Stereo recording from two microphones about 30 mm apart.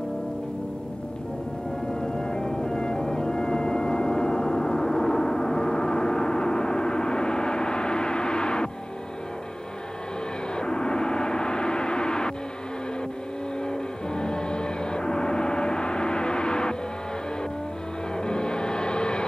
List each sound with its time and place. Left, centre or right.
2.0 s music: left
10.5 s gong: left
13.7 s gong: left
18.1 s music: left